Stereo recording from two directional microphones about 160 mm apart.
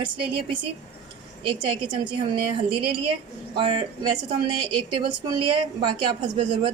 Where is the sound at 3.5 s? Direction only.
30° right (ahead or behind).